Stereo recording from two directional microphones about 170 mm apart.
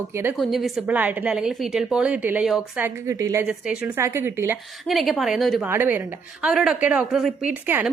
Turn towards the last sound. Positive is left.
turn(degrees=-10)  # may be behind; listen again after turning